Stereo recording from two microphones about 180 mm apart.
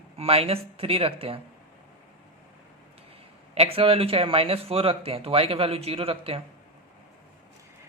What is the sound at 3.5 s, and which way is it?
Speech, 35° right (ahead or behind).